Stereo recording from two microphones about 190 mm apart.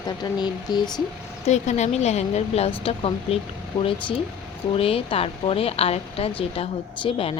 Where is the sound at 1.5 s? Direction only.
35° left (ahead or behind).